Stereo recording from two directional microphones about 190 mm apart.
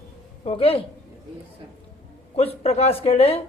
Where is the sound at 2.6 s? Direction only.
30° left (ahead or behind).